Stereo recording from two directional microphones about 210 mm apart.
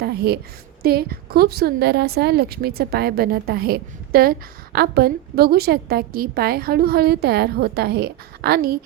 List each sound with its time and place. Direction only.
0.0 s a woman's voice: 50° right (ahead or behind)